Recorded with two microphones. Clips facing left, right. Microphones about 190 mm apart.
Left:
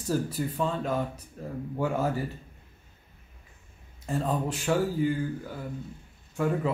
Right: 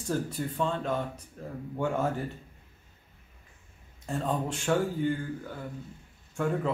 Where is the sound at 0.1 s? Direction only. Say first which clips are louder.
Left 2 dB; 5° left (ahead or behind).